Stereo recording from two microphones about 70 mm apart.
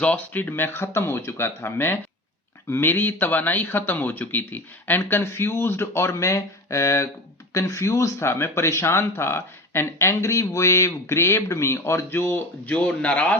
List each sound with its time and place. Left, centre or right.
0.0 s speech: left
12.7 s speech: centre